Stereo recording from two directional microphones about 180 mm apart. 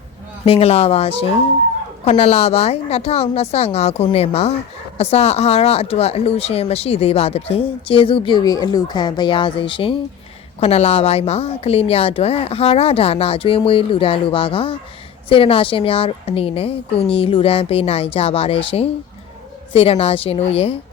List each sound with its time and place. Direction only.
0.4 s speech: 35° left (ahead or behind)